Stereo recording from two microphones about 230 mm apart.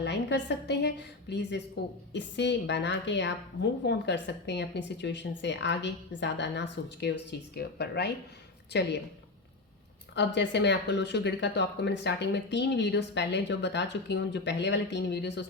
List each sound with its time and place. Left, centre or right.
0.0 s a woman's voice: left
10.2 s a woman's voice: left